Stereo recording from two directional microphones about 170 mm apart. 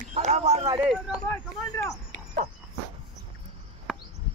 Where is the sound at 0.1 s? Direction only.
40° right (ahead or behind).